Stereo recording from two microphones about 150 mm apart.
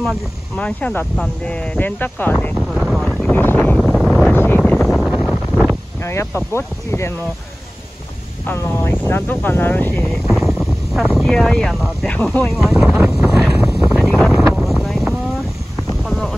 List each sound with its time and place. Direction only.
0.6 s speech: 10° left (ahead or behind)
2.5 s speech: centre (ahead or behind)
4.3 s wind noise: 15° left (ahead or behind)
6.0 s speech: 15° left (ahead or behind)
8.5 s speech: 15° left (ahead or behind)
10.0 s speech: centre (ahead or behind)
12.2 s speech: 10° left (ahead or behind)
12.5 s wind noise: 5° right (ahead or behind)
16.0 s a sound: centre (ahead or behind)